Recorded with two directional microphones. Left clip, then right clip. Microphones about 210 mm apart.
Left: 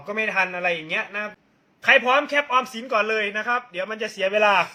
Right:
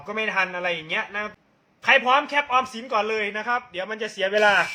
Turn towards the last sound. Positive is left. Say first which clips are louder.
# even
turn(degrees=-5)  # may be behind; listen again after turning